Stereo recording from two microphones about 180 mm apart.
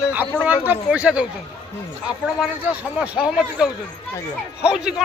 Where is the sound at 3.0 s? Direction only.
5° right (ahead or behind).